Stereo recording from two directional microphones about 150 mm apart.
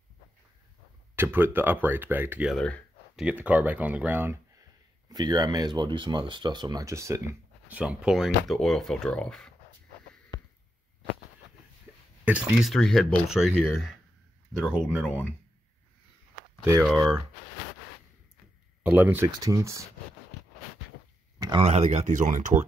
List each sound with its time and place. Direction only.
1.1 s speech: 15° right (ahead or behind)
2.5 s a sound: 5° left (ahead or behind)
3.3 s speech: 10° right (ahead or behind)
5.1 s speech: 25° right (ahead or behind); by 9.5 s 5° left (ahead or behind)
12.3 s speech: 5° right (ahead or behind)
15.0 s speech: 10° left (ahead or behind)
16.9 s speech: 20° right (ahead or behind)
18.8 s speech: 10° right (ahead or behind)
19.2 s speech: 25° right (ahead or behind)
21.4 s a sound: 30° right (ahead or behind)
21.6 s speech: 45° right (ahead or behind)